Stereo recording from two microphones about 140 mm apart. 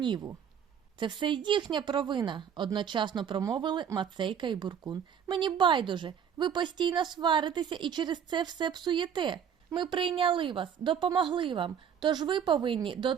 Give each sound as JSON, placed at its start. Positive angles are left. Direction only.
{"t": 0.0, "sound": "a woman's voice", "side_deg": -35}